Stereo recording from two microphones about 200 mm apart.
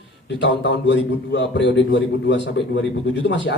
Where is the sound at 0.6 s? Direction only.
65° left (ahead or behind).